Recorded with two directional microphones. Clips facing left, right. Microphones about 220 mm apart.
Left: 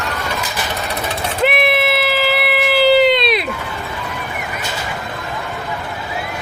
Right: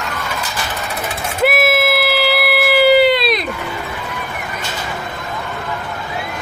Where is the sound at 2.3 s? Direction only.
5° right (ahead or behind).